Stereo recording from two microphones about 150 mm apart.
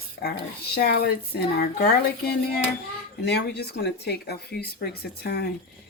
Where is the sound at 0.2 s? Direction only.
90° left.